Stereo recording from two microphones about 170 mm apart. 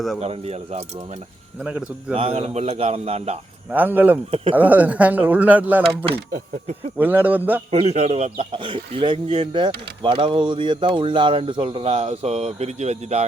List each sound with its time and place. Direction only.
0.2 s speech: 40° right (ahead or behind)
1.6 s speech: 5° right (ahead or behind)
2.1 s speech: 35° right (ahead or behind)
3.7 s speech: 10° right (ahead or behind)
7.7 s speech: 40° right (ahead or behind)